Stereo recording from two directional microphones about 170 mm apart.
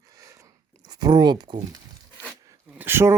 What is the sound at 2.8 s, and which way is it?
Speech, 15° right (ahead or behind).